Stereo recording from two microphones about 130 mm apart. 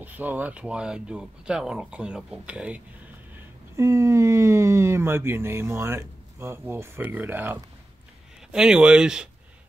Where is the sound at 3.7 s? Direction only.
20° right (ahead or behind); by 9.3 s 5° right (ahead or behind).